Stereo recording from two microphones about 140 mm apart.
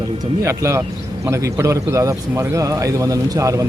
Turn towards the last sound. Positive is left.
turn(degrees=-25)  # may be behind; listen again after turning